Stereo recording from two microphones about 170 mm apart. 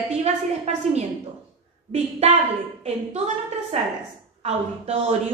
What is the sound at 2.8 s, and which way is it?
A woman's voice, 40° right (ahead or behind).